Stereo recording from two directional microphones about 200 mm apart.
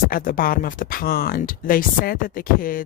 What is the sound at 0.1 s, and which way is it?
Speech, 45° left (ahead or behind).